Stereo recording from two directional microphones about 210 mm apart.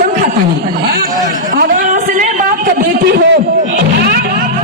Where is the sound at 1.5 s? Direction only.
40° right (ahead or behind).